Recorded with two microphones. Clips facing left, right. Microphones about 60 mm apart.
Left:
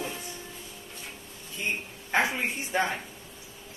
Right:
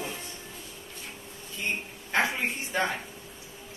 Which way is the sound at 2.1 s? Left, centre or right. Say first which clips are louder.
Left 1 dB; centre.